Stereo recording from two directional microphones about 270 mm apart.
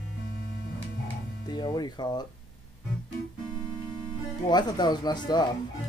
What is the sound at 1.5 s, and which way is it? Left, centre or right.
Speech, centre.